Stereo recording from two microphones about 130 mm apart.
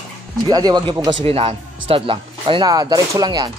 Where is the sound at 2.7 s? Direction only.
30° right (ahead or behind).